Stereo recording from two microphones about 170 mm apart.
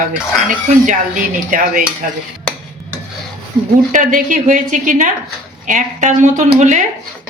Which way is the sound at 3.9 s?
50° right (ahead or behind).